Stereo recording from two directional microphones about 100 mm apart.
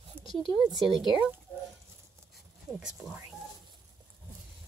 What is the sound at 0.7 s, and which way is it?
Speech, centre (ahead or behind).